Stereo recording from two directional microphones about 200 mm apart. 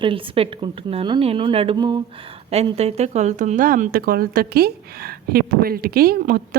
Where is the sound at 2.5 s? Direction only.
30° right (ahead or behind).